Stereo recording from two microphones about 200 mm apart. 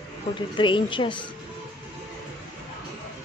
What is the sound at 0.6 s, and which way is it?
Speech, 25° left (ahead or behind).